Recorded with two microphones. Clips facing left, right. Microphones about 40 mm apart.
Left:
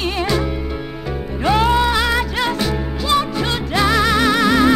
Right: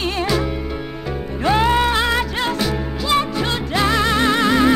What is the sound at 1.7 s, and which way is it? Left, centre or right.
Music, right.